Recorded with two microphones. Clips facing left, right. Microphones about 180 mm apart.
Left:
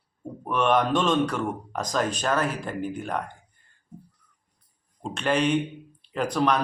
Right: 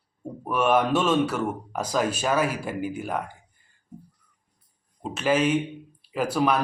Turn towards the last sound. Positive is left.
turn(degrees=-5)  # may be behind; listen again after turning